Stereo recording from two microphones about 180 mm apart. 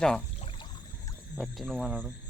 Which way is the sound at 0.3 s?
30° left (ahead or behind).